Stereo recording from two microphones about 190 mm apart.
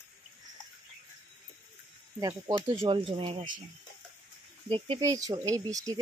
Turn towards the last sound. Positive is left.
turn(degrees=-20)  # may be behind; listen again after turning